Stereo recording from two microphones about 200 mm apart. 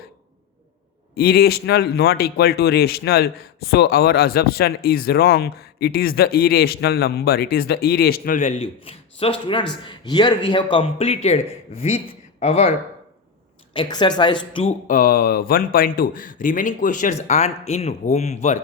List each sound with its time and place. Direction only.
1.1 s a man's voice: 50° left (ahead or behind); by 12.7 s 35° left (ahead or behind)
13.7 s a man's voice: 20° left (ahead or behind)
14.8 s speech: 45° left (ahead or behind)